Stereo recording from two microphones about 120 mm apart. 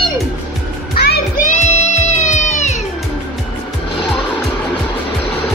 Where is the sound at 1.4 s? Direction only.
75° left (ahead or behind).